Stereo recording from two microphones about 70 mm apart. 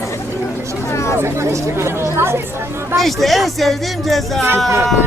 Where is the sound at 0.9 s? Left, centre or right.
Left.